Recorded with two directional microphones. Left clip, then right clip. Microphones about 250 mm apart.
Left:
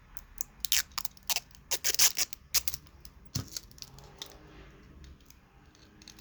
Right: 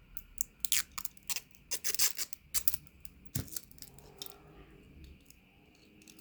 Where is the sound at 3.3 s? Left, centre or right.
Centre.